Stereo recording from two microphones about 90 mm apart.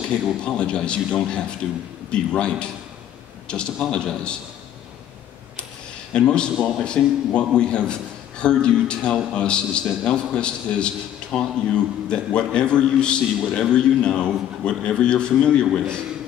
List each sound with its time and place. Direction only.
0.4 s a man's voice: 10° left (ahead or behind)
6.1 s a man's voice: 10° left (ahead or behind)